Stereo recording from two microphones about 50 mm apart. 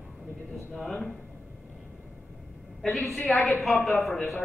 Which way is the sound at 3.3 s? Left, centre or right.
Centre.